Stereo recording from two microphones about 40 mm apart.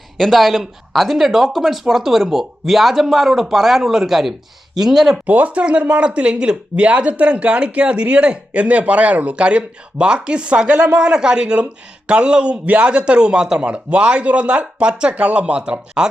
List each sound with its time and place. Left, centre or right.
0.2 s speech: centre
5.2 s speech: right
10.9 s speech: right
12.6 s speech: right
12.9 s speech: right